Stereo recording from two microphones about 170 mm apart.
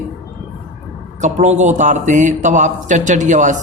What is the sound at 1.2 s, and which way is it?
A man's voice, 45° right (ahead or behind).